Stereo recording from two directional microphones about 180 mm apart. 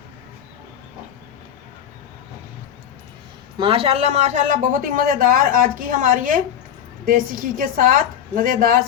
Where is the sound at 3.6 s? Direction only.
30° right (ahead or behind).